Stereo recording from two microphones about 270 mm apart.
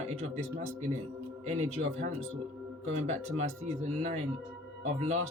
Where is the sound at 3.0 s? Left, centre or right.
Right.